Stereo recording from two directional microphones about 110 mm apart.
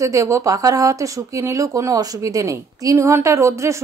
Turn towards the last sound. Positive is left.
turn(degrees=-25)  # may be behind; listen again after turning